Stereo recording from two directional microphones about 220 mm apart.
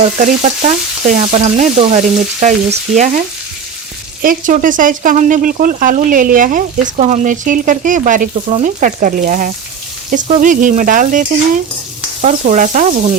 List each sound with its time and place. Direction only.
0.2 s speech: 35° right (ahead or behind)
4.2 s speech: 40° right (ahead or behind)